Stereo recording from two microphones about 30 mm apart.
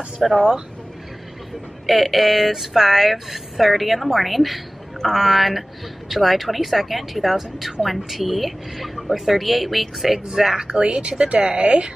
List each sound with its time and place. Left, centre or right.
0.2 s speech: centre
1.9 s a woman's voice: centre
10.7 s speech: right